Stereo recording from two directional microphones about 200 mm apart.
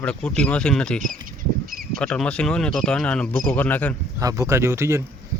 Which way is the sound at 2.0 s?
5° left (ahead or behind).